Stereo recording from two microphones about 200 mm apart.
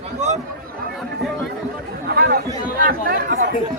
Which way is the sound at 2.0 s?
50° right (ahead or behind).